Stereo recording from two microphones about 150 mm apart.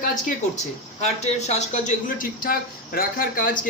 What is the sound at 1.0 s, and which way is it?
Speech, 50° left (ahead or behind).